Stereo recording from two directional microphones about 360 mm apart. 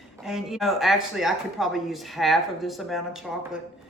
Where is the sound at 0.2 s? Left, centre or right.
Centre.